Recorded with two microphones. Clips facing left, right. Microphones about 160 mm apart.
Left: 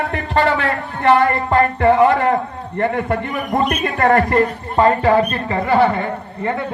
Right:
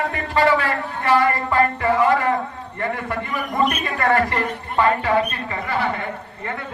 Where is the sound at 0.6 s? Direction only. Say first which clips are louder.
Left 6 dB; 55° left (ahead or behind).